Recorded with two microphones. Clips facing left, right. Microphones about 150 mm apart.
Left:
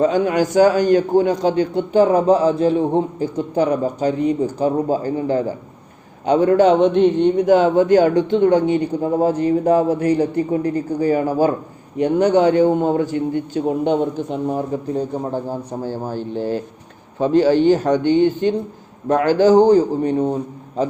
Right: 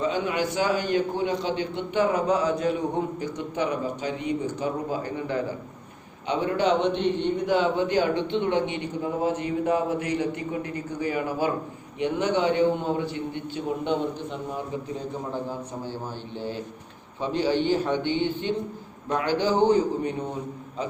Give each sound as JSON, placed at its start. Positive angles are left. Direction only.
{"t": 0.0, "sound": "a man's voice", "side_deg": 45}